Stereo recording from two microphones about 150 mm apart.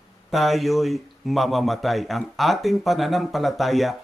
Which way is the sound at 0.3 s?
Centre (ahead or behind).